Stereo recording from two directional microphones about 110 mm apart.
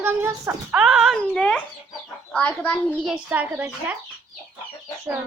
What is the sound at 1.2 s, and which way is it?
A child's voice, 10° left (ahead or behind).